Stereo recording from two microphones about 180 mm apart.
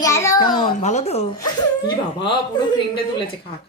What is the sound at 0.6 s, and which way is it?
Speech, 40° left (ahead or behind).